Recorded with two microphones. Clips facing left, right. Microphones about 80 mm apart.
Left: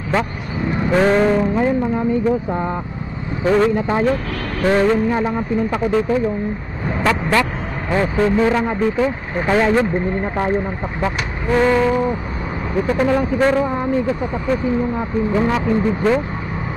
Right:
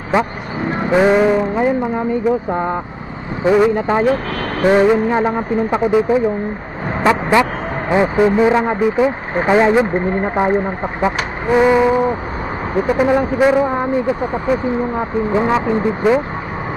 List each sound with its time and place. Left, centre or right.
0.1 s speech: centre
3.4 s speech: centre
3.7 s speech: right
14.2 s speech: right